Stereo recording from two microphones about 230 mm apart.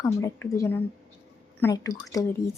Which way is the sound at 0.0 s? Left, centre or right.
Centre.